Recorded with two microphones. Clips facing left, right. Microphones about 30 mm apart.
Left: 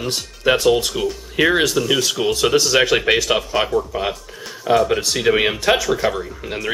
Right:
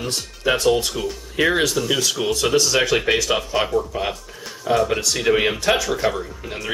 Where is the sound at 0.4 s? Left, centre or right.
Centre.